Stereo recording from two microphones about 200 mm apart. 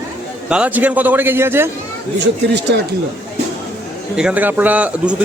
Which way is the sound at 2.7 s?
60° right (ahead or behind).